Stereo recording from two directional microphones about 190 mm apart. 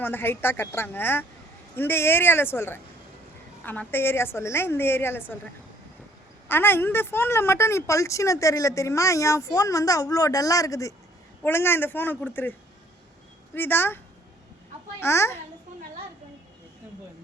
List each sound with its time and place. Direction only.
0.0 s a woman's voice: 10° left (ahead or behind)
6.5 s a woman's voice: 10° left (ahead or behind)
15.0 s a woman's voice: 15° left (ahead or behind)